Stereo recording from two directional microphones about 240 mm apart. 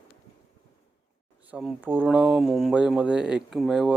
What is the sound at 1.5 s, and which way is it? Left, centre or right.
Speech, centre.